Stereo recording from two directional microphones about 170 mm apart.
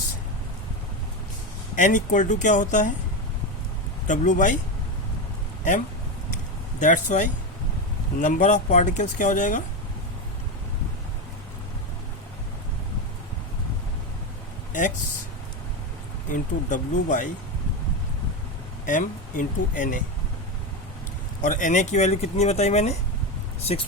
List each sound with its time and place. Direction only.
1.7 s a woman's voice: 50° left (ahead or behind)
4.0 s a woman's voice: 45° left (ahead or behind)
6.7 s a woman's voice: 45° left (ahead or behind)
14.7 s speech: 50° left (ahead or behind)
16.3 s a woman's voice: 50° left (ahead or behind)
18.9 s a woman's voice: 50° left (ahead or behind)
21.4 s speech: 45° left (ahead or behind)